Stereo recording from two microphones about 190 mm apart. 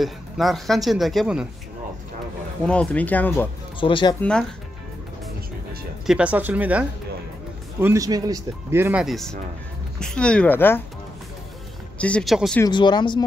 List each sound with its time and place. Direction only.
0.0 s speech: centre (ahead or behind)
2.6 s speech: 5° left (ahead or behind)
3.8 s speech: 25° left (ahead or behind)
4.2 s speech: 5° left (ahead or behind)
6.0 s a man's voice: 5° right (ahead or behind)
9.0 s speech: centre (ahead or behind)
12.0 s speech: 5° left (ahead or behind)
12.6 s speech: 25° left (ahead or behind)